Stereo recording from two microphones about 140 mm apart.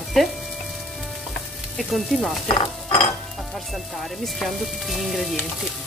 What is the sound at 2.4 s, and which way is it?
Stir, 35° left (ahead or behind).